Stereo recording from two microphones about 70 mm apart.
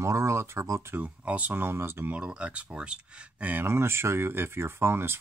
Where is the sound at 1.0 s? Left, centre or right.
Right.